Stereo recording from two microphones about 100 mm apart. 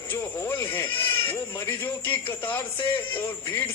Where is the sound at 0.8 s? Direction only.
60° left (ahead or behind).